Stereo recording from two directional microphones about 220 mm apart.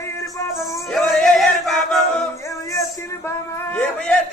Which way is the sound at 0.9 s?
Centre (ahead or behind).